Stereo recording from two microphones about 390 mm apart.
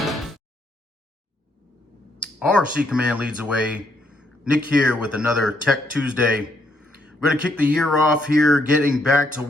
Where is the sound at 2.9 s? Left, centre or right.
Centre.